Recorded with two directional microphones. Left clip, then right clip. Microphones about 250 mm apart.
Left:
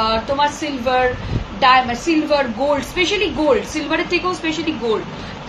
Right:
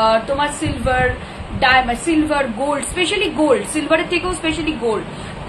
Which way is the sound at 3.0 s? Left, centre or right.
Centre.